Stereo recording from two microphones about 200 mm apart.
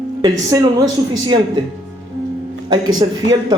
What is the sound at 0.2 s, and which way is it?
Speech, 15° right (ahead or behind).